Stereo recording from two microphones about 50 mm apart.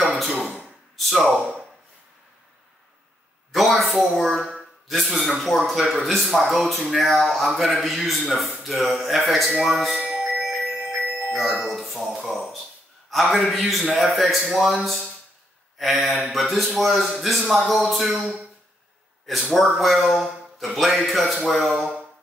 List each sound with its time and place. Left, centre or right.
0.0 s a sound: centre
0.5 s a sound: centre
0.9 s speech: centre
3.5 s speech: centre
9.9 s music: centre
10.5 s music: centre
11.1 s speech: centre
12.1 s speech: centre
13.1 s speech: centre